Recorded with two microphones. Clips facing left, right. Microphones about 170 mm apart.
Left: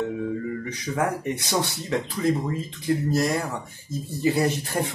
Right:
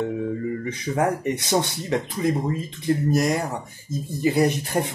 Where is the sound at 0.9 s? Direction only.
20° right (ahead or behind).